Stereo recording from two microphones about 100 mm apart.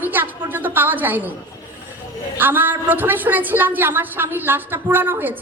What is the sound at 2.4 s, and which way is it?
A woman's voice, 20° right (ahead or behind).